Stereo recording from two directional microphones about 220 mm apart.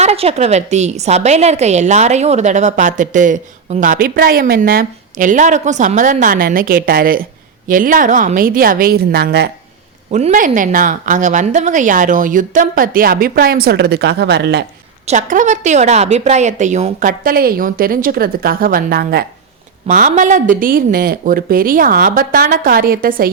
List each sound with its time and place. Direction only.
0.0 s a woman's voice: 30° right (ahead or behind); by 9.5 s 45° right (ahead or behind)
10.1 s a woman's voice: 30° right (ahead or behind); by 14.6 s 50° right (ahead or behind)
15.0 s a woman's voice: 35° right (ahead or behind)